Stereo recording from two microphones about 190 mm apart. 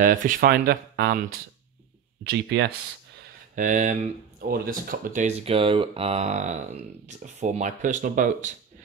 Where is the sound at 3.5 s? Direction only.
40° right (ahead or behind).